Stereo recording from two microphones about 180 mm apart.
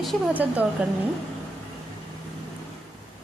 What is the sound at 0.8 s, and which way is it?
Speech, 5° right (ahead or behind).